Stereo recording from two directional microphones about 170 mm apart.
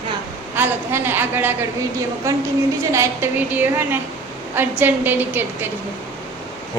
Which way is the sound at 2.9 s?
15° right (ahead or behind).